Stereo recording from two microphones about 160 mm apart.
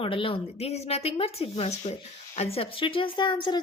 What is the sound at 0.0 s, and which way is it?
A woman's voice, 35° left (ahead or behind).